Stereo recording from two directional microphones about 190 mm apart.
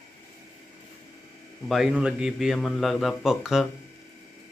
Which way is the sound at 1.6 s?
Centre (ahead or behind).